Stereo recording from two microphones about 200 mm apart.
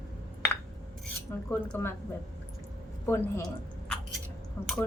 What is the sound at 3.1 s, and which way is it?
Speech, 15° left (ahead or behind).